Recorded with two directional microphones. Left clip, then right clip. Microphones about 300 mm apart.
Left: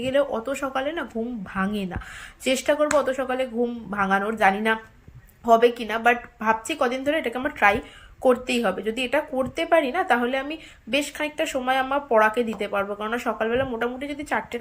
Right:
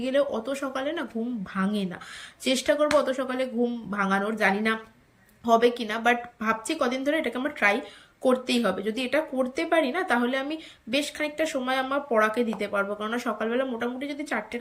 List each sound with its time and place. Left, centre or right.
0.0 s speech: centre